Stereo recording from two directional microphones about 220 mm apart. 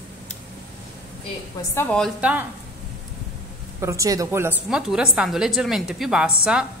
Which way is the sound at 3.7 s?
15° right (ahead or behind).